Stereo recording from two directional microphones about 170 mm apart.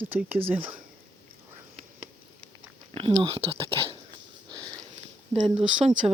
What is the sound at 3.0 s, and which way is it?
Speech, 35° right (ahead or behind).